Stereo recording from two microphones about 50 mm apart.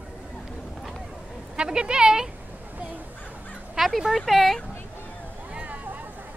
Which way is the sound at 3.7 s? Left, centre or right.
Centre.